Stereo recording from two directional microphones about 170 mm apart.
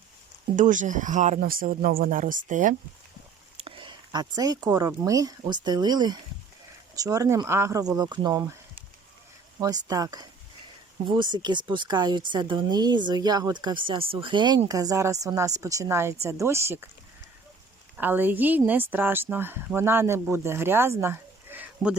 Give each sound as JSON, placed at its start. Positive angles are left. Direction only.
{"t": 0.5, "sound": "speech", "side_deg": -50}
{"t": 3.6, "sound": "speech", "side_deg": -30}
{"t": 9.6, "sound": "speech", "side_deg": -20}
{"t": 17.9, "sound": "speech", "side_deg": -10}
{"t": 21.0, "sound": "a sound", "side_deg": -10}